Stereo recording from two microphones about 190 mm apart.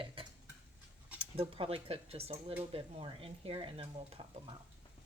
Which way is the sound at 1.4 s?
30° right (ahead or behind).